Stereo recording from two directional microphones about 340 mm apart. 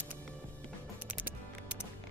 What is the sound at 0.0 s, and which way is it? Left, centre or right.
Music, centre.